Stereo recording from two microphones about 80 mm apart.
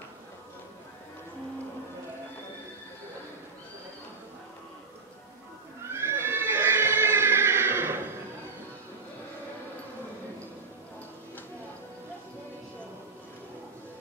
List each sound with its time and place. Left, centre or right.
5.9 s horse: right